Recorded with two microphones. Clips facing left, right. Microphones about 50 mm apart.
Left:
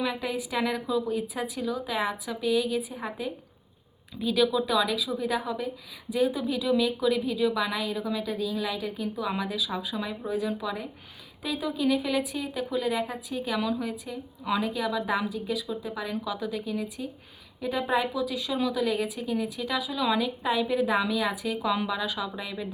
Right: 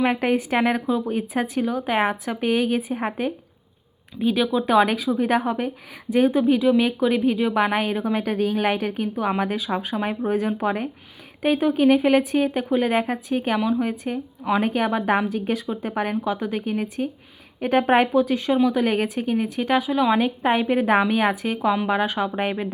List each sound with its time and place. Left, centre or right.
0.0 s a woman's voice: right
4.2 s a woman's voice: right
13.6 s a woman's voice: right
13.8 s a woman's voice: right
16.2 s a woman's voice: right
18.1 s a woman's voice: right